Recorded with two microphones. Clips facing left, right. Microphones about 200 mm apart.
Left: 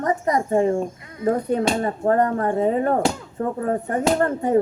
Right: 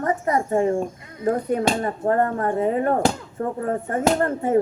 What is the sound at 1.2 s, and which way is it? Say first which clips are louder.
Speech: left 1 dB; 25° left (ahead or behind).